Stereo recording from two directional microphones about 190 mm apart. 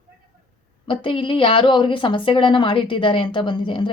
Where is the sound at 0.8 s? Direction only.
25° left (ahead or behind).